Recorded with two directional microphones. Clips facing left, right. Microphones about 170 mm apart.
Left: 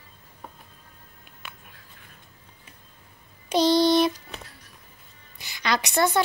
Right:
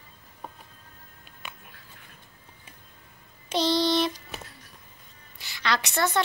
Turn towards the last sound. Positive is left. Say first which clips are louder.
# left 3 dB
turn(degrees=15)  # may be behind; listen again after turning